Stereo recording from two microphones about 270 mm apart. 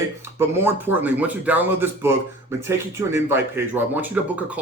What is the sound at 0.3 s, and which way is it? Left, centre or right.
A man's voice, centre.